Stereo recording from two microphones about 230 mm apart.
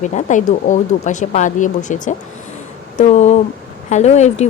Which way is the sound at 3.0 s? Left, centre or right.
Left.